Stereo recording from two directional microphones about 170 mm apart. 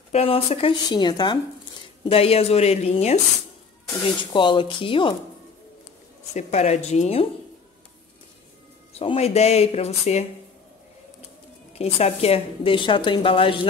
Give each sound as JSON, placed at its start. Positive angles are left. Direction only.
{"t": 0.1, "sound": "a woman's voice", "side_deg": 35}
{"t": 4.2, "sound": "speech", "side_deg": 30}
{"t": 6.3, "sound": "a woman's voice", "side_deg": 40}
{"t": 8.9, "sound": "a woman's voice", "side_deg": 35}
{"t": 11.7, "sound": "a woman's voice", "side_deg": 35}